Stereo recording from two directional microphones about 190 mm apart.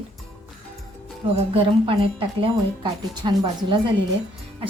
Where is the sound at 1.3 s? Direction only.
30° right (ahead or behind).